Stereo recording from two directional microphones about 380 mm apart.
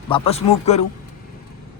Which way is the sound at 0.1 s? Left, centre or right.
Centre.